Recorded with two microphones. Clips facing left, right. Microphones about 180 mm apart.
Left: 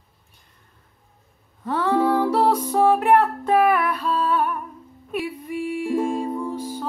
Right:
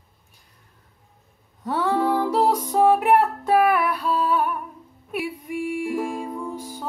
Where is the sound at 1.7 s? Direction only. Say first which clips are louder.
Left 2 dB; 10° right (ahead or behind).